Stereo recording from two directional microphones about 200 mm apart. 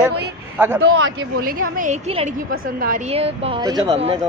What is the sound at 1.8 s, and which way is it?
Speech, 35° right (ahead or behind).